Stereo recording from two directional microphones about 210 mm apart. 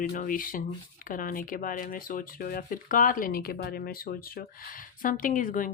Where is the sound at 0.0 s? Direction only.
40° left (ahead or behind).